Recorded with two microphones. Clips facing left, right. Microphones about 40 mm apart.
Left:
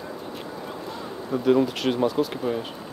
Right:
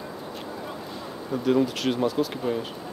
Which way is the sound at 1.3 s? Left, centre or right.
Centre.